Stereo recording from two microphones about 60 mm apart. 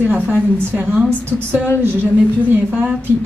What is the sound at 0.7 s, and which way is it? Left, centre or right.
Speech, right.